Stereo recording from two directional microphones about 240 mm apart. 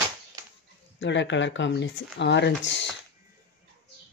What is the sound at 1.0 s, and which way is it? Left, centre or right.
Speech, left.